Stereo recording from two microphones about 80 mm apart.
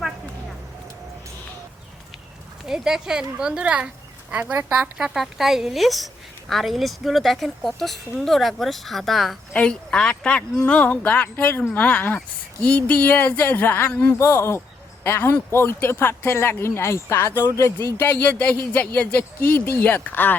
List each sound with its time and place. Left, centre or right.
2.6 s speech: centre
9.5 s speech: centre
14.2 s speech: left